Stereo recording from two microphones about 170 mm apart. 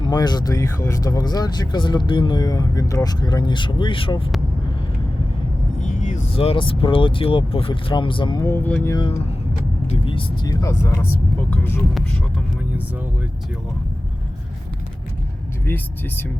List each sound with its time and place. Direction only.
0.1 s speech: 25° left (ahead or behind)
5.8 s speech: 45° left (ahead or behind); by 8.4 s 25° left (ahead or behind)
8.4 s speech: 10° left (ahead or behind)
9.8 s speech: 35° left (ahead or behind); by 11.9 s 10° left (ahead or behind)
15.6 s speech: 10° left (ahead or behind)